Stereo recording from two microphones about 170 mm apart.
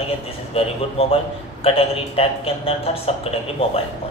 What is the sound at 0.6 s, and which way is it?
A man's voice, 35° left (ahead or behind).